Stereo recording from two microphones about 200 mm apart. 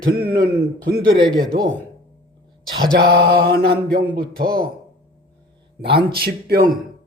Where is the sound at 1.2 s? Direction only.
20° right (ahead or behind).